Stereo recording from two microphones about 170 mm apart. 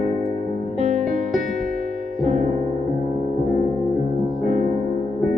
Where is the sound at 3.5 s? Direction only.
50° right (ahead or behind).